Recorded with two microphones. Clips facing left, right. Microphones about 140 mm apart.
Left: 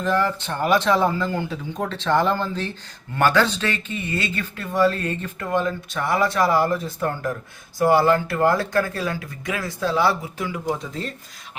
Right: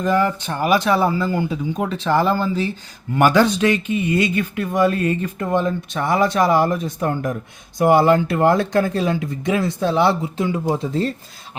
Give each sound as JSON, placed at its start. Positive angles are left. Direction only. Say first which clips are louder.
{"t": 0.0, "sound": "speech", "louder": "right 3 dB", "side_deg": -15}